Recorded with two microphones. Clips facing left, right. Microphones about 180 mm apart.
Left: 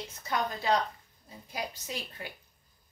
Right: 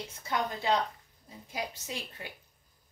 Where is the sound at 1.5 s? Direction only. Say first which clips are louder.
Even; 20° right (ahead or behind).